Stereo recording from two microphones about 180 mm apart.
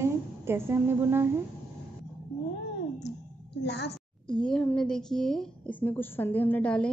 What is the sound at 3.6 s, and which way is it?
Speech, 70° left (ahead or behind).